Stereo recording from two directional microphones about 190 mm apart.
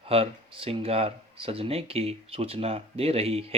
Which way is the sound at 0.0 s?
30° right (ahead or behind).